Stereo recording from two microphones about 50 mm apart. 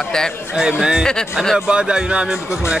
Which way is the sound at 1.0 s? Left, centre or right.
Centre.